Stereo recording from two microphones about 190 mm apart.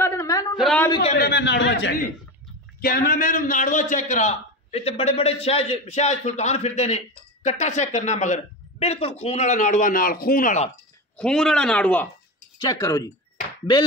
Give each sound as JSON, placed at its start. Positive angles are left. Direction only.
{"t": 0.0, "sound": "a sound", "side_deg": 15}
{"t": 0.6, "sound": "a sound", "side_deg": 0}
{"t": 1.1, "sound": "a man's voice", "side_deg": 60}
{"t": 2.8, "sound": "a man's voice", "side_deg": 50}
{"t": 11.1, "sound": "speech", "side_deg": 5}
{"t": 12.5, "sound": "speech", "side_deg": 20}